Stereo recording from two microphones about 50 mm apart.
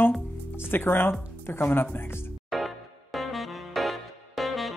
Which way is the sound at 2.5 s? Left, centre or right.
Centre.